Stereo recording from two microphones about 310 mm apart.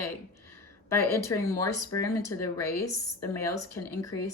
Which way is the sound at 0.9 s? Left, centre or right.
Centre.